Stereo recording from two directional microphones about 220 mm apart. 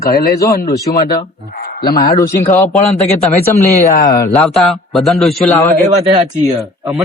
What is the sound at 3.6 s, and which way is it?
Speech, 35° left (ahead or behind).